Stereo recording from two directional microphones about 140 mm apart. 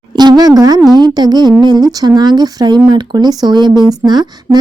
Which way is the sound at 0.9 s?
30° right (ahead or behind).